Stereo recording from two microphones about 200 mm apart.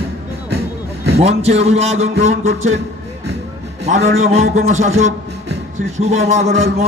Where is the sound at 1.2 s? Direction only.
30° right (ahead or behind).